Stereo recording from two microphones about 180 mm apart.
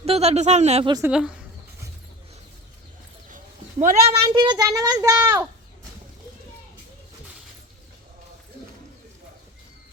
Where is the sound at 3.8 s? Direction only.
40° right (ahead or behind).